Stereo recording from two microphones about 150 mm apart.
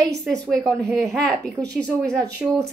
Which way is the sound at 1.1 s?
5° left (ahead or behind).